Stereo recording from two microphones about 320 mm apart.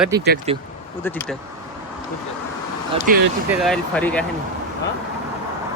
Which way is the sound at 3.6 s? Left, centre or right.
Centre.